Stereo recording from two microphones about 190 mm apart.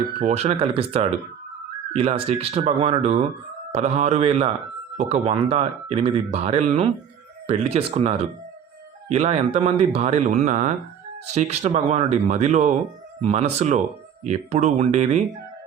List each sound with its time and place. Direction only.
0.2 s speech: 35° right (ahead or behind)